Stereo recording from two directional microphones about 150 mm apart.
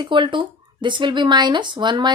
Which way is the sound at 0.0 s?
30° right (ahead or behind).